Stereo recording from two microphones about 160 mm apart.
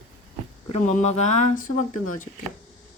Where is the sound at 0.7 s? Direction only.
45° left (ahead or behind).